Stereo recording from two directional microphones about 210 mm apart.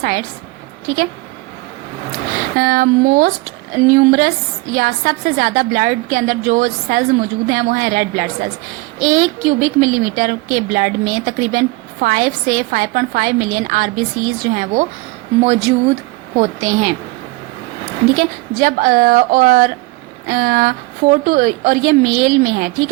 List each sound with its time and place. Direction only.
0.0 s a woman's voice: 45° right (ahead or behind)
2.6 s a woman's voice: 40° right (ahead or behind)
18.2 s a woman's voice: 40° right (ahead or behind)